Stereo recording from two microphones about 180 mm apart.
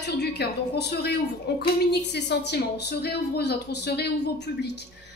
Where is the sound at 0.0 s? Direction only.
70° left (ahead or behind).